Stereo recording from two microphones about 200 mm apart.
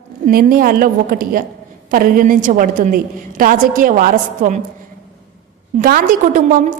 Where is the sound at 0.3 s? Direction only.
45° right (ahead or behind).